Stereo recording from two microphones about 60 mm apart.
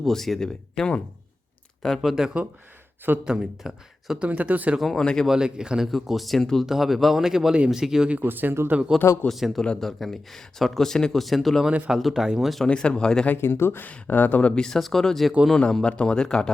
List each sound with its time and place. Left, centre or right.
0.1 s speech: centre
1.8 s speech: centre
4.2 s speech: right
4.8 s speech: centre
5.2 s speech: centre
8.2 s speech: right
8.9 s speech: centre
9.3 s speech: centre
11.6 s speech: centre
12.6 s speech: centre
13.3 s speech: left
14.5 s speech: centre
15.7 s speech: centre